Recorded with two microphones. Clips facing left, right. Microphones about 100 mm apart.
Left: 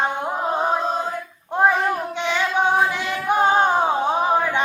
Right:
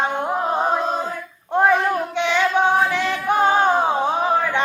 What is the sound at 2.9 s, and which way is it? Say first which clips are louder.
Singing: right 1 dB; 10° left (ahead or behind).